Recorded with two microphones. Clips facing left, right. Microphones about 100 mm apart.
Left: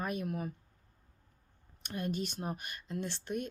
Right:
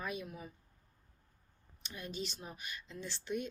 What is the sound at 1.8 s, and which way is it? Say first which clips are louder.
Speech: left 7 dB; 55° left (ahead or behind).